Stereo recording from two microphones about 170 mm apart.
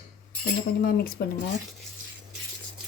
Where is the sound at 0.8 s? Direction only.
65° left (ahead or behind).